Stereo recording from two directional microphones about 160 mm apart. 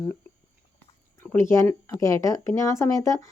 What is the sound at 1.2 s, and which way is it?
Speech, 15° left (ahead or behind).